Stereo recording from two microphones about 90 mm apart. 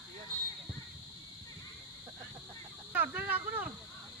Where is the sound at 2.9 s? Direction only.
20° right (ahead or behind).